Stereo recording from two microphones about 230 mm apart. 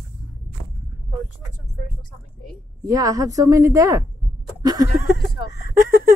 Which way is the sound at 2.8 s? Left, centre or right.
Centre.